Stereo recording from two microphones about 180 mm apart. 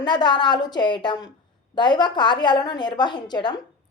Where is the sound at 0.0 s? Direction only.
25° left (ahead or behind).